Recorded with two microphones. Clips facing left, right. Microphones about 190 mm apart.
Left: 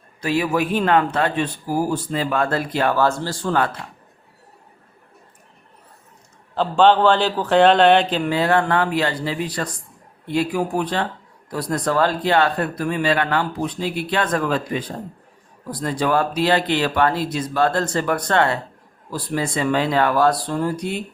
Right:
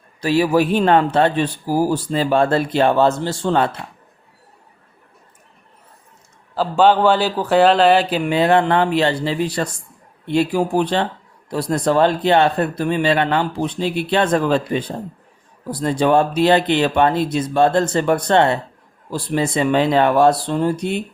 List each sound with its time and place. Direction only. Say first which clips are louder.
0.2 s speech: right 5 dB; 30° right (ahead or behind)
6.5 s a man's voice: right 1 dB; 5° right (ahead or behind)
8.4 s speech: right 4 dB; 20° right (ahead or behind)